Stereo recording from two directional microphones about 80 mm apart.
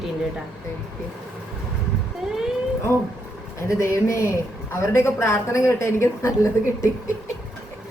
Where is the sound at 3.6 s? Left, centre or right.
Left.